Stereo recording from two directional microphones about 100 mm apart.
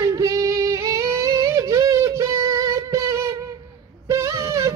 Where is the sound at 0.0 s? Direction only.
35° right (ahead or behind).